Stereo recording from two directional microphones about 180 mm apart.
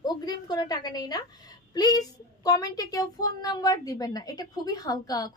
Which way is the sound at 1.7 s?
20° left (ahead or behind).